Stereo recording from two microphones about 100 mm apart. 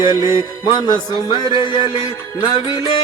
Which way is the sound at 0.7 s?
50° left (ahead or behind).